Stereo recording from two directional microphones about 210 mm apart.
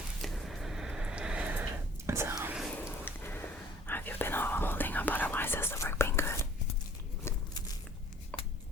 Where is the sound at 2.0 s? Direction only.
10° right (ahead or behind).